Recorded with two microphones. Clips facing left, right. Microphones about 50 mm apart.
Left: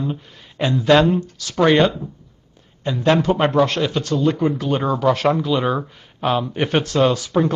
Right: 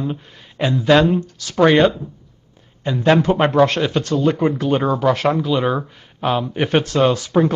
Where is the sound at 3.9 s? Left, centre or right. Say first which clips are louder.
Right 2 dB; right.